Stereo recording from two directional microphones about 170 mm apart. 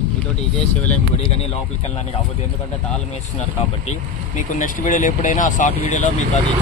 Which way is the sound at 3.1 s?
40° left (ahead or behind).